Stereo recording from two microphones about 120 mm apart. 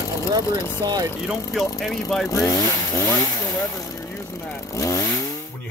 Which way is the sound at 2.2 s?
30° left (ahead or behind).